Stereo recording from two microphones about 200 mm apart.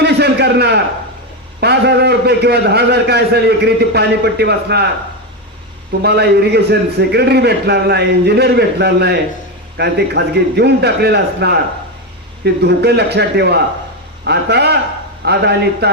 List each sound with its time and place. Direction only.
0.0 s a sound: 55° right (ahead or behind)
1.6 s a man's voice: 55° right (ahead or behind)
6.0 s a man's voice: 55° right (ahead or behind)
12.6 s a man's voice: 55° right (ahead or behind)